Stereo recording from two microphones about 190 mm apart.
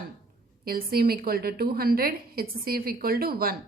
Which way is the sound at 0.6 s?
50° right (ahead or behind).